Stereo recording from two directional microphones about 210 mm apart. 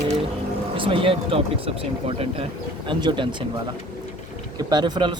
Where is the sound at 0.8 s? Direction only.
25° right (ahead or behind).